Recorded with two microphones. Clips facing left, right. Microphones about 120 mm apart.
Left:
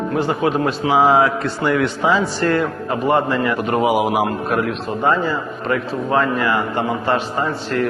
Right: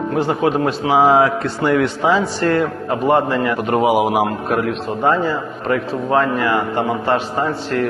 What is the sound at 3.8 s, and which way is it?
Speech, centre (ahead or behind).